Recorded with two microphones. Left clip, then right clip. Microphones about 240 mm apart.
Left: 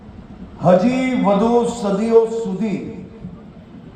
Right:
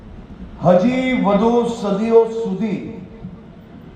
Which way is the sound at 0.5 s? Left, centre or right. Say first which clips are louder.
Even; left.